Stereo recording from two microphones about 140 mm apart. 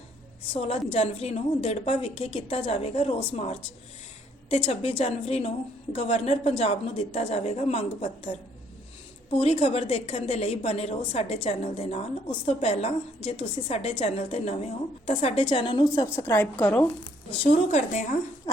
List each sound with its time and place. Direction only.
0.5 s a woman's voice: 45° left (ahead or behind)
16.0 s a woman's voice: 20° left (ahead or behind)
17.4 s a woman's voice: 50° left (ahead or behind)